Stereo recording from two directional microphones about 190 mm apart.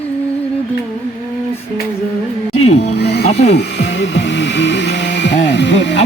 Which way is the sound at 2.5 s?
35° left (ahead or behind).